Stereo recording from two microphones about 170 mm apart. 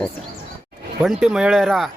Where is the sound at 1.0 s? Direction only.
5° right (ahead or behind).